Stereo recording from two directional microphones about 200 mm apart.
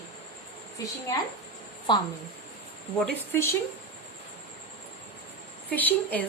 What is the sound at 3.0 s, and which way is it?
Speech, 10° left (ahead or behind).